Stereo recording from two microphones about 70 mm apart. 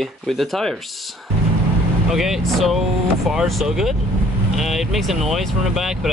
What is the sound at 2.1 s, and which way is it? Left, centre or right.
Speech, centre.